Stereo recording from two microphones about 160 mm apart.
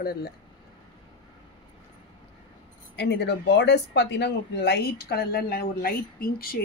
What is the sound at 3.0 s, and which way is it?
Speech, 90° left.